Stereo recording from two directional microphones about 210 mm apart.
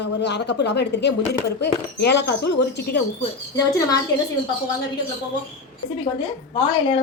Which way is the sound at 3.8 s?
15° left (ahead or behind).